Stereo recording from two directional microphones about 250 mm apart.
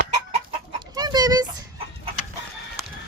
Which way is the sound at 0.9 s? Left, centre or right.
Centre.